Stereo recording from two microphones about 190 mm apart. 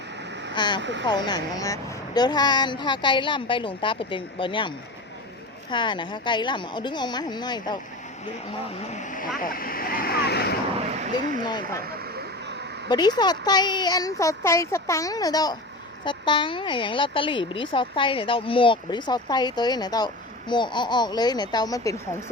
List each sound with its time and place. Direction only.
0.5 s speech: 25° left (ahead or behind)
0.8 s speech: 70° right (ahead or behind)
1.0 s speech: 20° left (ahead or behind)
5.7 s speech: 25° left (ahead or behind)
8.4 s speech: 30° left (ahead or behind); by 10.6 s 60° left (ahead or behind)
10.9 s speech: 40° right (ahead or behind)
11.9 s vehicle: 55° right (ahead or behind)
12.9 s speech: 20° left (ahead or behind)